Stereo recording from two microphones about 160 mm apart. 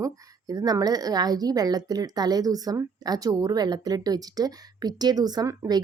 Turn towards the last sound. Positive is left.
turn(degrees=-25)  # may be behind; listen again after turning